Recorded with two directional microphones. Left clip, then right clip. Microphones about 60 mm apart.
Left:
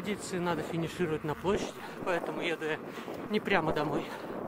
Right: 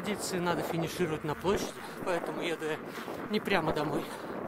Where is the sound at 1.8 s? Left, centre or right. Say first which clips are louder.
Even; centre.